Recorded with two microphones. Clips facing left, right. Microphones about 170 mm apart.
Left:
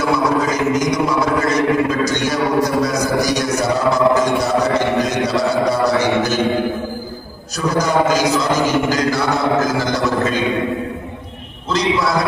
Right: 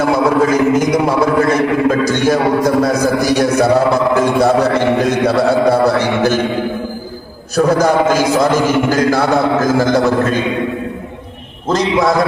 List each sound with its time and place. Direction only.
0.0 s a man's voice: 55° right (ahead or behind)
7.5 s a man's voice: 55° right (ahead or behind)
11.7 s a man's voice: 50° right (ahead or behind)